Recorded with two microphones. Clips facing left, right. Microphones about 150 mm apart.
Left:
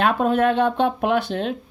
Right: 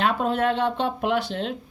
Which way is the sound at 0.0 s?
55° left (ahead or behind).